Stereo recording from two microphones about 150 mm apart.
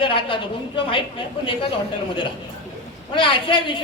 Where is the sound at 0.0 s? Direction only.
35° left (ahead or behind).